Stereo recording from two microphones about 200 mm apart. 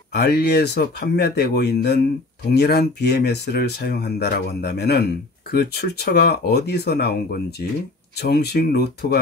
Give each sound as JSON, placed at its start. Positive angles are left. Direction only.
{"t": 0.1, "sound": "speech", "side_deg": 55}